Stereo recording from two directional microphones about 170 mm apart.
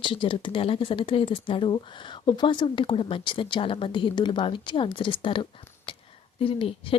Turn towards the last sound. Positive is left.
turn(degrees=35)  # may be behind; listen again after turning